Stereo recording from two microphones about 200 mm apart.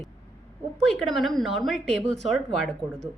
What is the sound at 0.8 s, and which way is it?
A woman's voice, centre (ahead or behind).